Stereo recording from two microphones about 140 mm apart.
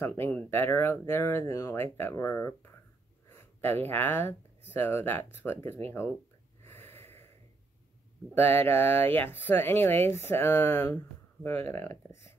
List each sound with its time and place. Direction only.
0.0 s speech: 15° left (ahead or behind)
6.6 s snort: 15° left (ahead or behind)
8.4 s speech: 15° left (ahead or behind)